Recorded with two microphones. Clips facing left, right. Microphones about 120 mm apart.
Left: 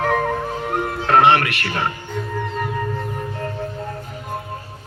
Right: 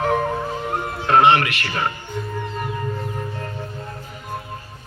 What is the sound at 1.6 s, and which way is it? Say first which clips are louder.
Speech: left 1 dB; 25° left (ahead or behind).